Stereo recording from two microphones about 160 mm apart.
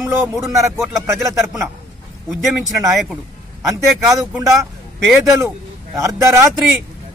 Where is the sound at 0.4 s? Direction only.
Centre (ahead or behind).